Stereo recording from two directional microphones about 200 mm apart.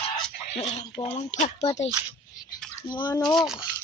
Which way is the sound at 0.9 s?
30° left (ahead or behind).